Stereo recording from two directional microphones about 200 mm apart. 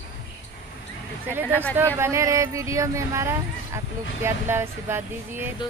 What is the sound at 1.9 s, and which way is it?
Speech, 15° right (ahead or behind).